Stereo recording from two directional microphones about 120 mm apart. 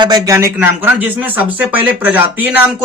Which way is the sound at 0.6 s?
15° right (ahead or behind).